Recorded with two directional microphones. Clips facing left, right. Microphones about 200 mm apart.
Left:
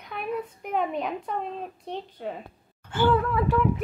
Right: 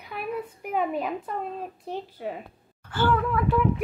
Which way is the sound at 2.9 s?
20° left (ahead or behind).